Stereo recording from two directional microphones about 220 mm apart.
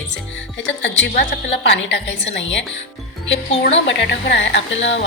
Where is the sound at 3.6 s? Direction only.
55° left (ahead or behind).